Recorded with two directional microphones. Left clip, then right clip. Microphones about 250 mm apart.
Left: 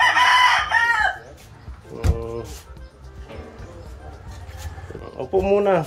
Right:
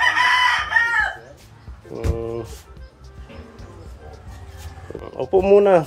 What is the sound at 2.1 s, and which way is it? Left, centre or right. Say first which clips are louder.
Music: right 3 dB; right.